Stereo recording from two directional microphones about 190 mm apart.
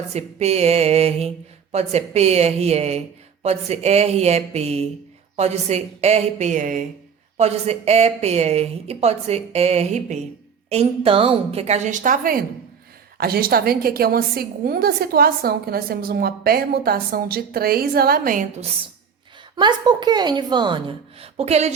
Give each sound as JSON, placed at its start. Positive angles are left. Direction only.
{"t": 0.1, "sound": "a woman's voice", "side_deg": -35}
{"t": 19.5, "sound": "a woman's voice", "side_deg": -20}